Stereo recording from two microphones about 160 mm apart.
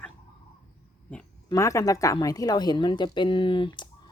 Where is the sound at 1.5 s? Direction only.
20° left (ahead or behind).